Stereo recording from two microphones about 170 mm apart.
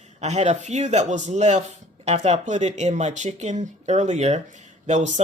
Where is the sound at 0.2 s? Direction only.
40° right (ahead or behind).